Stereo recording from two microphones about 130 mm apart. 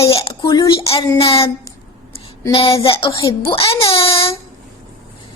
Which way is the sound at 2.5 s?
45° left (ahead or behind).